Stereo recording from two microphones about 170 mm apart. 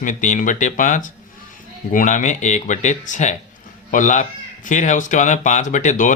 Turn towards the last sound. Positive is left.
turn(degrees=45)  # may be behind; listen again after turning